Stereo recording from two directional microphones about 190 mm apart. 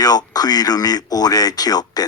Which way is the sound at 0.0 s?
20° left (ahead or behind).